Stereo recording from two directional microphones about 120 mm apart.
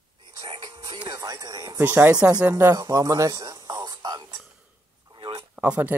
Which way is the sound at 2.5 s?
25° right (ahead or behind).